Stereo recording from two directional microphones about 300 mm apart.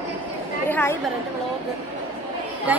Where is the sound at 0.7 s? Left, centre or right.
Centre.